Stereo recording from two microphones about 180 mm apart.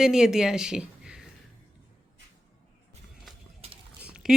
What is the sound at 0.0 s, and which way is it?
A woman's voice, 5° right (ahead or behind).